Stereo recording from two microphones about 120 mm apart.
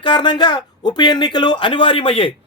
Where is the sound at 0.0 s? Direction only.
40° left (ahead or behind).